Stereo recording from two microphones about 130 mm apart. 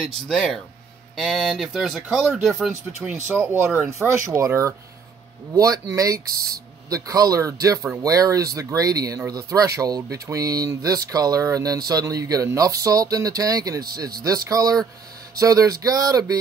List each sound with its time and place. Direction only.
0.0 s speech: centre (ahead or behind)
3.3 s speech: 15° right (ahead or behind)